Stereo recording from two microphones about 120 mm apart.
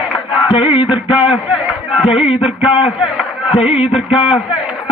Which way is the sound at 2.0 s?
50° left (ahead or behind).